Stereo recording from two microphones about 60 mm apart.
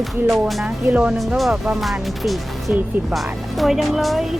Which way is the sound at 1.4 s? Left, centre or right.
Centre.